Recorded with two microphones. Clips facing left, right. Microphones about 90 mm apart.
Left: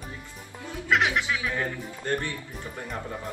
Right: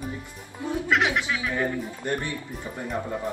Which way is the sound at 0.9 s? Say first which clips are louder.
Even; centre (ahead or behind).